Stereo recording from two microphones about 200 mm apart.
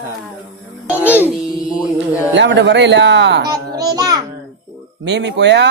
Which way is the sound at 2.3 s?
60° right (ahead or behind).